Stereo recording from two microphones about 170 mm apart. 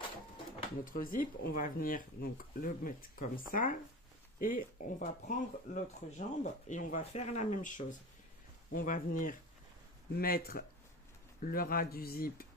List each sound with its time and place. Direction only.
0.9 s speech: 55° left (ahead or behind)